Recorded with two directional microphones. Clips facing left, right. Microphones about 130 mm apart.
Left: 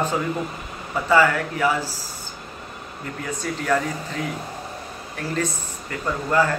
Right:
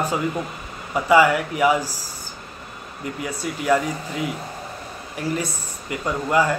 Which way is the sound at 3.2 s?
10° right (ahead or behind).